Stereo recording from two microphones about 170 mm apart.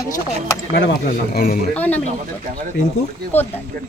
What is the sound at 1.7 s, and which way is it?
Speech, 10° left (ahead or behind).